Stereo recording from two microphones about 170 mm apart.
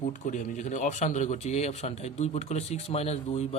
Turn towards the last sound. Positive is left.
turn(degrees=40)  # may be behind; listen again after turning